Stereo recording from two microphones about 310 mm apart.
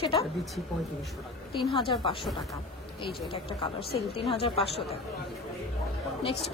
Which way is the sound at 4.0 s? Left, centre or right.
Centre.